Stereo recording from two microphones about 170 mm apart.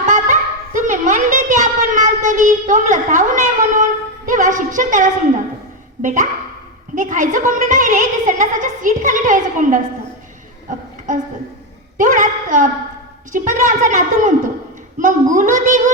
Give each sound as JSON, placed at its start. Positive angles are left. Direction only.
{"t": 0.0, "sound": "a sound", "side_deg": -50}
{"t": 4.3, "sound": "a woman's voice", "side_deg": -50}
{"t": 11.9, "sound": "a woman's voice", "side_deg": -50}